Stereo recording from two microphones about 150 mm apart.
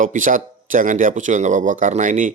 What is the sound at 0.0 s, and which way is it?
Speech, 60° right (ahead or behind).